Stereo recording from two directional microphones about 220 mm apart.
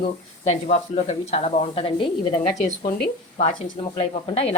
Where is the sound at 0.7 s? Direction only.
30° left (ahead or behind).